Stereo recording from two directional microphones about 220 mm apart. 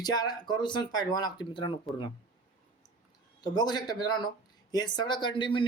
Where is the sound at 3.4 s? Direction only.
20° left (ahead or behind).